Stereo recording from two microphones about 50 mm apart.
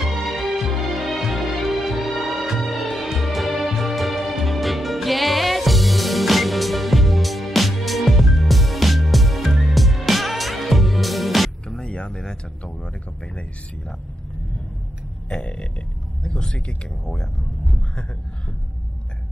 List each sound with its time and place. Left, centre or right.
0.1 s music: centre
11.6 s a sound: centre
15.2 s burping: centre
16.2 s speech: centre